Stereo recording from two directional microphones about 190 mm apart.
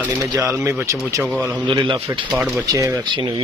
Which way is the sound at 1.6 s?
25° right (ahead or behind).